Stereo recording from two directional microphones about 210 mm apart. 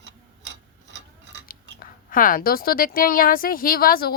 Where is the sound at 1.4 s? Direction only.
40° left (ahead or behind).